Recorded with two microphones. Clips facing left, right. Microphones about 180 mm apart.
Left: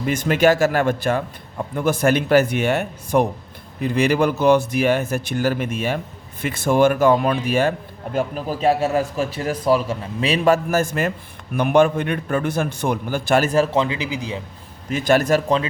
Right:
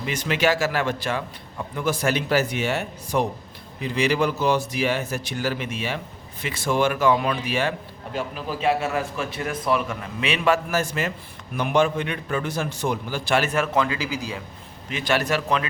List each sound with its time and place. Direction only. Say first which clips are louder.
0.0 s a man's voice: left 6 dB; 50° left (ahead or behind); by 13.8 s 35° left (ahead or behind)
13.8 s a man's voice: left 2 dB; 20° left (ahead or behind)
14.8 s a man's voice: left 7 dB; 45° left (ahead or behind)